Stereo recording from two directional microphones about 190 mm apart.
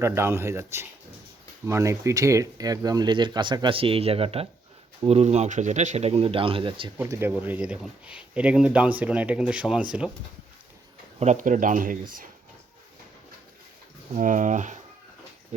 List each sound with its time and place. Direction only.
0.0 s speech: 15° right (ahead or behind)
6.9 s speech: 15° right (ahead or behind)
11.2 s speech: 40° right (ahead or behind)
14.2 s speech: 40° right (ahead or behind)